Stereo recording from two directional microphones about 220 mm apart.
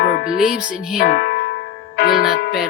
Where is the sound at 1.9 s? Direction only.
45° left (ahead or behind).